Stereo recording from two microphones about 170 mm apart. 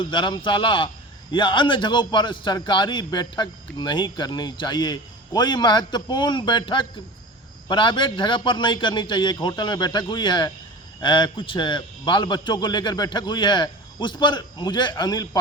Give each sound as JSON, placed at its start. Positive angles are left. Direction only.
{"t": 0.0, "sound": "a man's voice", "side_deg": 30}